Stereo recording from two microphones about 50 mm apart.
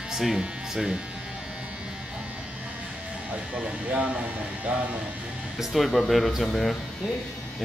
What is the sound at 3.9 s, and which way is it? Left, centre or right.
A man's voice, right.